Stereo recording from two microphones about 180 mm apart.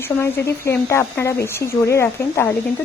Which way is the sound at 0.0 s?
15° left (ahead or behind).